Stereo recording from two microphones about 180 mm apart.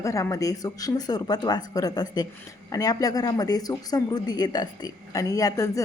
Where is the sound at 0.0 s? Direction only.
20° left (ahead or behind).